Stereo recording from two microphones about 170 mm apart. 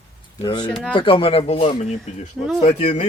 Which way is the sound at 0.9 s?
30° left (ahead or behind).